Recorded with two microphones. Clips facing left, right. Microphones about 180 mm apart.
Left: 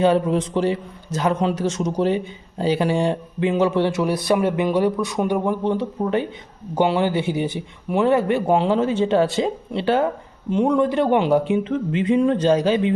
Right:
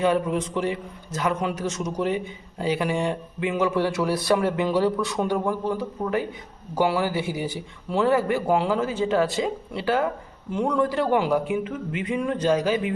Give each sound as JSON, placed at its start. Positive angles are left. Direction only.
{"t": 0.0, "sound": "a man's voice", "side_deg": 30}